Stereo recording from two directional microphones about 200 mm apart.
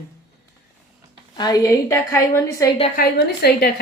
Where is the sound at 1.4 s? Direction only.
20° left (ahead or behind).